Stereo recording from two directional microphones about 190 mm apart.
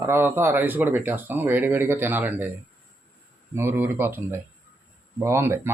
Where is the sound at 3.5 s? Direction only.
15° right (ahead or behind).